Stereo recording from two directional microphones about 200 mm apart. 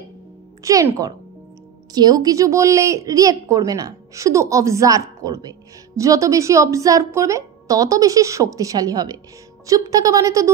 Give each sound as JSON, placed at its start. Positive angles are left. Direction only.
{"t": 0.7, "sound": "a woman's voice", "side_deg": -15}